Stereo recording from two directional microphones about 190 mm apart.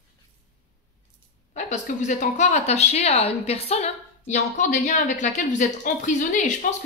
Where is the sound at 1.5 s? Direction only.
40° left (ahead or behind).